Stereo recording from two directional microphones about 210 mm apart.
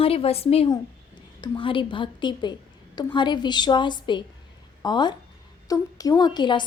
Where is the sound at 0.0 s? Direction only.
25° left (ahead or behind).